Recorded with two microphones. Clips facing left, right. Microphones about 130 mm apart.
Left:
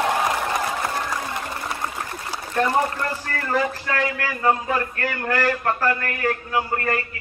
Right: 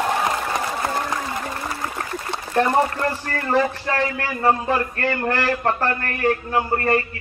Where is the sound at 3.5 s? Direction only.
30° right (ahead or behind).